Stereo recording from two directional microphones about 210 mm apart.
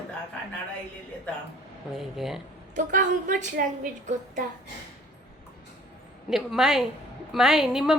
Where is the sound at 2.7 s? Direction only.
40° right (ahead or behind).